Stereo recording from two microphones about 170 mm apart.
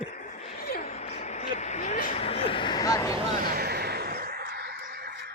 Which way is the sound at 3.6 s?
70° right (ahead or behind).